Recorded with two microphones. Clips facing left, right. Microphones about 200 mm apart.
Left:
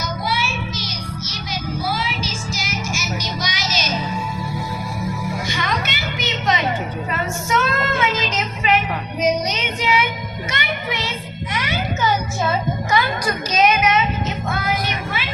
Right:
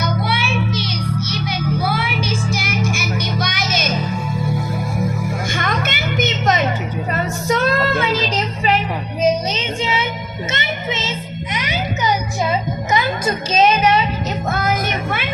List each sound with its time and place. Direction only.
0.0 s child singing: 60° right (ahead or behind)
1.8 s music: 60° right (ahead or behind)
5.5 s music: 50° right (ahead or behind); by 8.8 s 35° right (ahead or behind)
9.2 s child singing: 25° right (ahead or behind)
10.5 s music: 25° right (ahead or behind)
14.5 s vehicle: 45° right (ahead or behind)